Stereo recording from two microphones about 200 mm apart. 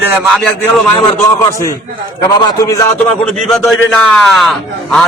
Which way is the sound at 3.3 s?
5° left (ahead or behind).